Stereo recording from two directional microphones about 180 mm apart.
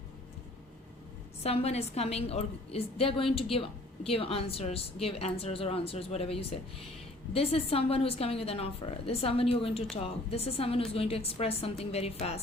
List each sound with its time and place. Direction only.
1.5 s a woman's voice: 35° left (ahead or behind)